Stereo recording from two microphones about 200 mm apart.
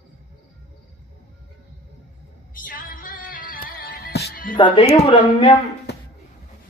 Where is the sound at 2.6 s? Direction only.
45° left (ahead or behind).